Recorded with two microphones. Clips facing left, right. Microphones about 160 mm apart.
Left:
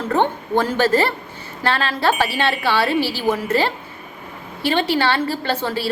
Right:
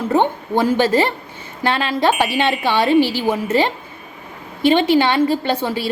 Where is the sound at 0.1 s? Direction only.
15° right (ahead or behind).